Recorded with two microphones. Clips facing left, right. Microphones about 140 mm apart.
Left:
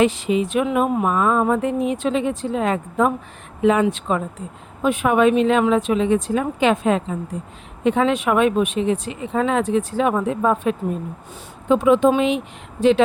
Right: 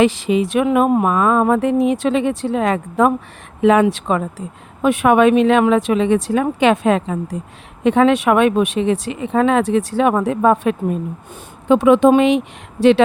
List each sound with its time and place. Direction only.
0.0 s a woman's voice: 90° right
7.9 s a woman's voice: 70° right (ahead or behind)